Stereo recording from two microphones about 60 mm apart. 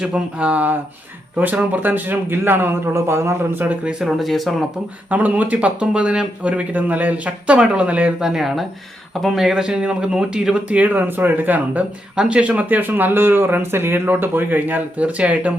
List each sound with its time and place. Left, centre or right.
0.0 s speech: centre; by 3.6 s right
3.6 s speech: right
4.0 s speech: centre
5.0 s speech: right
8.2 s speech: centre; by 15.5 s right